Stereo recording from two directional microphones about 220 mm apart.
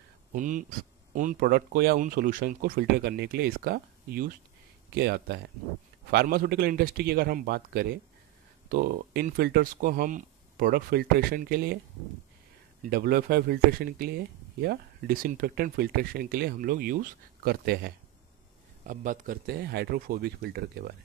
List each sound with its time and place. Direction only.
0.3 s speech: 35° right (ahead or behind)
12.8 s speech: 45° right (ahead or behind)